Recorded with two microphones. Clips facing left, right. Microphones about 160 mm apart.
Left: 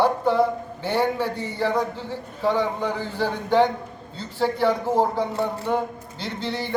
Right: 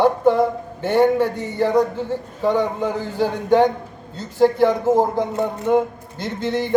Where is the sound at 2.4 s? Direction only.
20° right (ahead or behind).